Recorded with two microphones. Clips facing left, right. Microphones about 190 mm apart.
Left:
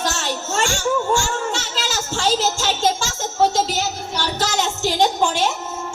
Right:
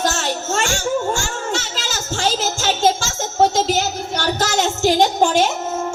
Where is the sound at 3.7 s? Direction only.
45° right (ahead or behind).